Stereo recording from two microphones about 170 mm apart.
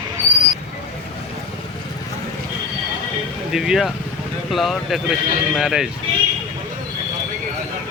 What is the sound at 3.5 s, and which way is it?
Speech, centre (ahead or behind).